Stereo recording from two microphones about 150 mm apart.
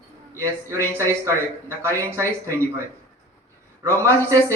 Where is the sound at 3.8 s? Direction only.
20° right (ahead or behind).